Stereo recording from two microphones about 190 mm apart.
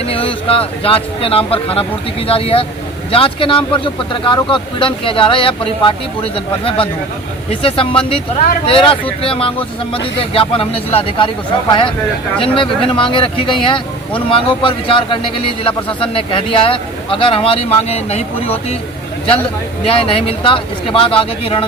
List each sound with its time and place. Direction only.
0.1 s a man's voice: 30° left (ahead or behind)
12.4 s a man's voice: 25° left (ahead or behind)
19.9 s a man's voice: 30° left (ahead or behind)